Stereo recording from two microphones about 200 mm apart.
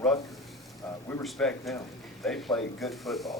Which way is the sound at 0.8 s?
5° left (ahead or behind).